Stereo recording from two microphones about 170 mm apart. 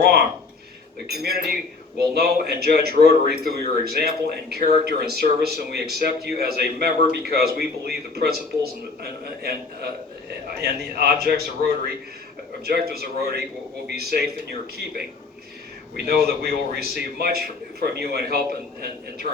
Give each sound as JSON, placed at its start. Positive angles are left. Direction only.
{"t": 1.2, "sound": "speech", "side_deg": -65}
{"t": 12.6, "sound": "speech", "side_deg": -65}
{"t": 16.0, "sound": "speech", "side_deg": -70}